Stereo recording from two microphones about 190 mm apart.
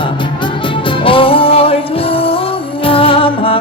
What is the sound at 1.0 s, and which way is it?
Music, 30° left (ahead or behind).